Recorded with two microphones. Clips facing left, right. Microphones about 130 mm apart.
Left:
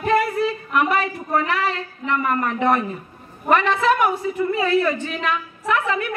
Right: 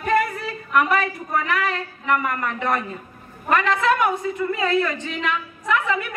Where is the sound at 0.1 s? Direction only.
25° left (ahead or behind).